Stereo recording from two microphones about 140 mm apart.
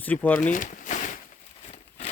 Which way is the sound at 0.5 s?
70° left (ahead or behind).